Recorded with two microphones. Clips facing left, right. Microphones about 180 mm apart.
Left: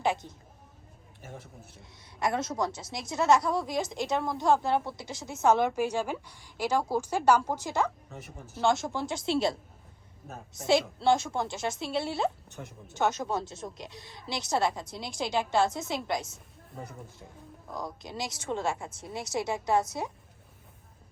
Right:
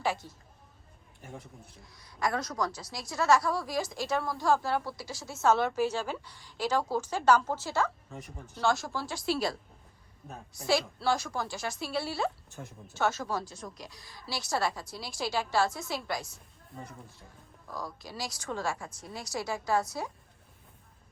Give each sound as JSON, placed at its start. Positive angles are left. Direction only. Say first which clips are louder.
{"t": 0.0, "sound": "a woman's voice", "louder": "left 3 dB", "side_deg": 20}
{"t": 1.2, "sound": "a man's voice", "louder": "even", "side_deg": 0}
{"t": 1.8, "sound": "a woman's voice", "louder": "left 1 dB", "side_deg": 25}
{"t": 8.1, "sound": "a man's voice", "louder": "left 1 dB", "side_deg": 5}
{"t": 8.6, "sound": "a woman's voice", "louder": "left 3 dB", "side_deg": 20}
{"t": 12.5, "sound": "a woman's voice", "louder": "left 1 dB", "side_deg": 0}
{"t": 12.9, "sound": "a woman's voice", "louder": "left 2 dB", "side_deg": 20}
{"t": 17.7, "sound": "a woman's voice", "louder": "left 2 dB", "side_deg": 20}